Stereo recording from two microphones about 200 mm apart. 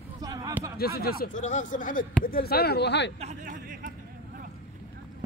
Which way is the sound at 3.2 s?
40° right (ahead or behind).